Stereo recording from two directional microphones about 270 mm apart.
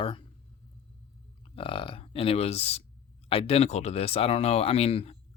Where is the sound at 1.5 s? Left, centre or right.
Centre.